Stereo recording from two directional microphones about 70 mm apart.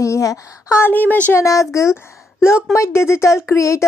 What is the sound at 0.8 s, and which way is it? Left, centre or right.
Speech, left.